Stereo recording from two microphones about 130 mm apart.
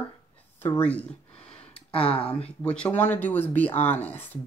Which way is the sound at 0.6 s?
15° left (ahead or behind).